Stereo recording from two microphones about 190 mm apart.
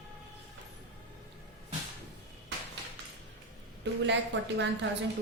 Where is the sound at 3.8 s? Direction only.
70° right (ahead or behind).